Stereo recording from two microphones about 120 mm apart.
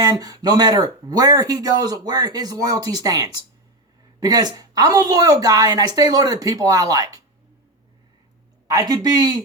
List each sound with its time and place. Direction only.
0.0 s speech: 30° right (ahead or behind)
8.7 s speech: 30° right (ahead or behind)